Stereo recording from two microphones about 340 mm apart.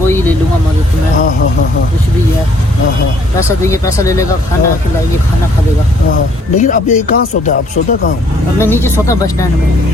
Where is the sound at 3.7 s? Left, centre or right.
Centre.